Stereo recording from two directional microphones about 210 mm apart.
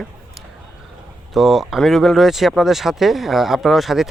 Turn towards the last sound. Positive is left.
turn(degrees=0)  # may be behind; listen again after turning